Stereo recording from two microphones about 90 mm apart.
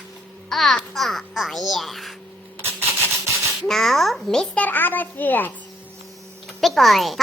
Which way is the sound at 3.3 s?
5° left (ahead or behind).